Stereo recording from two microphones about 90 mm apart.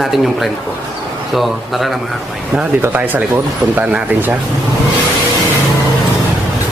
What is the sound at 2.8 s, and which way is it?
Speech, 20° right (ahead or behind).